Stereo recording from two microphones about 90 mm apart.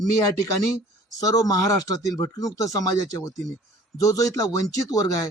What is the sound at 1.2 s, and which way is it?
Speech, 40° left (ahead or behind).